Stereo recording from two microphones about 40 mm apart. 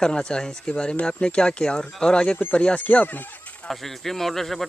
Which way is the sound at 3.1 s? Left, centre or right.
Left.